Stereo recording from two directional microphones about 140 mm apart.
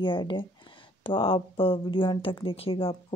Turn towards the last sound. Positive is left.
turn(degrees=40)  # may be behind; listen again after turning